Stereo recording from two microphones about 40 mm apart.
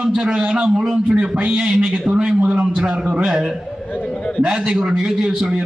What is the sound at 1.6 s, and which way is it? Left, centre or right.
A man's voice, centre.